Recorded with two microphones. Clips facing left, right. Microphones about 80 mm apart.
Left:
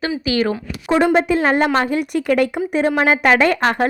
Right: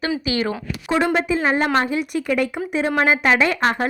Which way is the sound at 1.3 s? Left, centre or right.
Left.